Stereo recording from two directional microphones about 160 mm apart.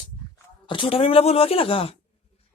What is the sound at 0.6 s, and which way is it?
Speech, 30° left (ahead or behind).